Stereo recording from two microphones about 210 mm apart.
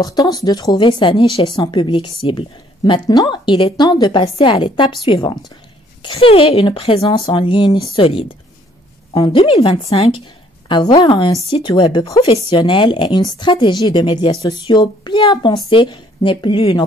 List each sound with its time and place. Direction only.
0.0 s a woman's voice: 15° left (ahead or behind)